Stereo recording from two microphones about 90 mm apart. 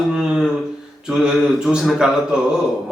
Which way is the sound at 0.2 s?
5° right (ahead or behind).